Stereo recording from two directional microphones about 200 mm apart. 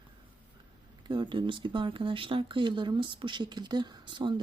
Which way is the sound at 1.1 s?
25° right (ahead or behind).